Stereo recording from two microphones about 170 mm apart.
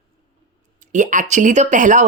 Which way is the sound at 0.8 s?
45° right (ahead or behind).